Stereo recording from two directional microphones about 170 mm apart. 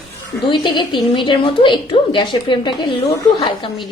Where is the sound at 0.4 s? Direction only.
25° left (ahead or behind).